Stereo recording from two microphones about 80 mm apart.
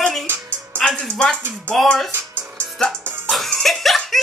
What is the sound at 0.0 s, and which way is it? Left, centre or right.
Music, centre.